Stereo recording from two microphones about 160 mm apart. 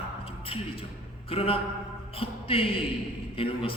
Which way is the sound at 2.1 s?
35° left (ahead or behind).